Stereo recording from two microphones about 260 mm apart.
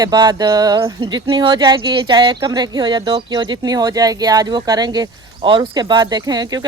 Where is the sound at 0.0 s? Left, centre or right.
Centre.